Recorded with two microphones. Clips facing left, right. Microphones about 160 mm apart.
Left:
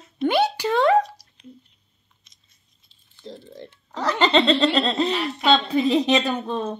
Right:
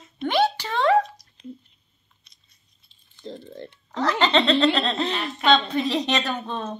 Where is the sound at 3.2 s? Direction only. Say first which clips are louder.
Right 2 dB; 10° left (ahead or behind).